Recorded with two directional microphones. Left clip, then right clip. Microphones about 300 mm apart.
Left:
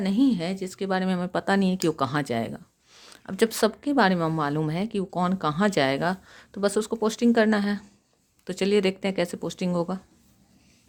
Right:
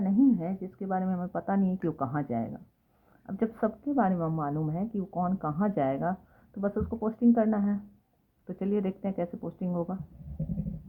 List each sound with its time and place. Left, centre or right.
0.0 s a woman's voice: left